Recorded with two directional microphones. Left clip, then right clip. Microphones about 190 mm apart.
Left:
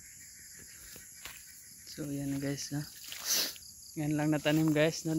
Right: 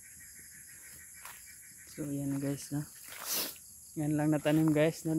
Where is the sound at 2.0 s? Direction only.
Centre (ahead or behind).